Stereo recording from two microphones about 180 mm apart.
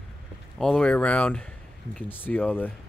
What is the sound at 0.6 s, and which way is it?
Speech, 5° left (ahead or behind).